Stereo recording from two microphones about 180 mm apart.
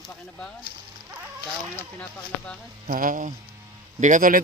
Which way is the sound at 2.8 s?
50° right (ahead or behind).